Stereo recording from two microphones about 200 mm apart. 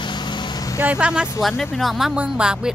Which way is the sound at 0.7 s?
5° right (ahead or behind).